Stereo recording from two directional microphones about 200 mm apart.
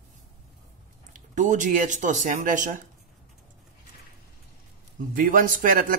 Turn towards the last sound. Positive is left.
turn(degrees=-45)  # may be behind; listen again after turning